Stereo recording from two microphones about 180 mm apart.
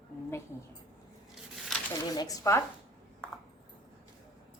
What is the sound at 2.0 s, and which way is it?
Speech, 20° left (ahead or behind).